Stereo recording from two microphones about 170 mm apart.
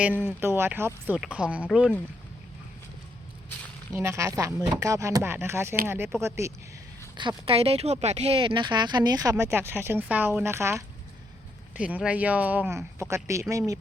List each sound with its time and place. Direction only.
0.0 s speech: 10° right (ahead or behind)
3.9 s speech: 15° right (ahead or behind)
7.2 s speech: 30° right (ahead or behind)